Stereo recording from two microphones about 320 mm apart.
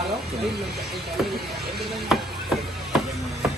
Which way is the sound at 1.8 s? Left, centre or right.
Centre.